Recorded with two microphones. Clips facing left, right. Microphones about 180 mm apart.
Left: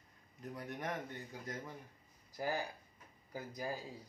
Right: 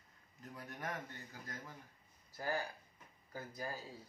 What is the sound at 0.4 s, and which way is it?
Speech, 15° left (ahead or behind).